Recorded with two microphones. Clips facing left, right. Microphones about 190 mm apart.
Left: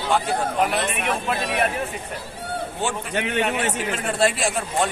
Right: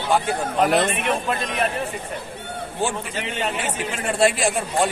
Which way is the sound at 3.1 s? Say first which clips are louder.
Left 3 dB; 65° left (ahead or behind).